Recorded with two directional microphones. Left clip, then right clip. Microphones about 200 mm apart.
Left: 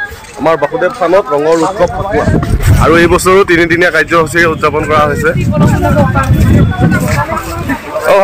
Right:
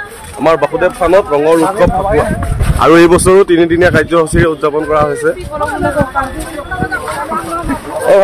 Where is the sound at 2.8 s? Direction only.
35° right (ahead or behind).